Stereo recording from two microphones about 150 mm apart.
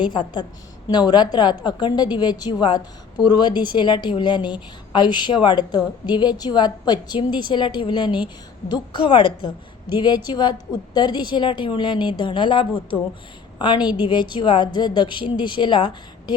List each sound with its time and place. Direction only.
0.0 s a woman's voice: 30° left (ahead or behind)